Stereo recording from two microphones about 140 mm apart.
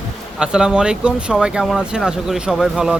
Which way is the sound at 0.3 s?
5° right (ahead or behind).